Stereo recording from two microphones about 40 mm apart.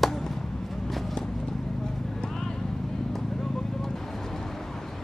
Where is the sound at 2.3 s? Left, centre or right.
Centre.